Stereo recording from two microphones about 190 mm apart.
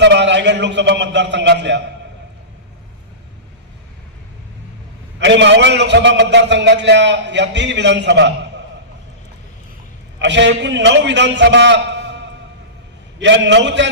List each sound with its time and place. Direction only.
0.0 s a man's voice: 65° right (ahead or behind)
5.2 s a man's voice: 65° right (ahead or behind)
10.2 s a man's voice: 70° right (ahead or behind)
13.1 s a man's voice: 70° right (ahead or behind)